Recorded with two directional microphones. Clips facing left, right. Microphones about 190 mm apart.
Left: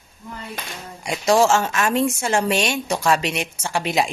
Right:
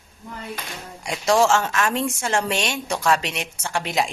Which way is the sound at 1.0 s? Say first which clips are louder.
Left 2 dB; 10° left (ahead or behind).